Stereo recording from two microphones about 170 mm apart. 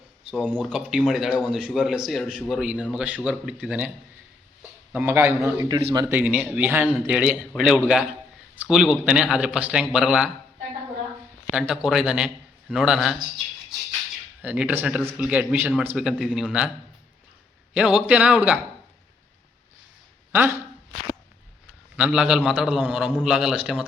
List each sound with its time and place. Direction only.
0.3 s a man's voice: 10° right (ahead or behind); by 6.1 s 25° right (ahead or behind)
6.1 s a man's voice: 10° right (ahead or behind)
11.5 s a man's voice: 5° right (ahead or behind)
14.4 s speech: 10° right (ahead or behind)
17.7 s speech: 5° right (ahead or behind)
20.3 s speech: 10° right (ahead or behind)
21.9 s a man's voice: 5° right (ahead or behind)